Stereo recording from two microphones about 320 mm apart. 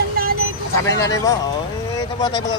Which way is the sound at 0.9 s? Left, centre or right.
Centre.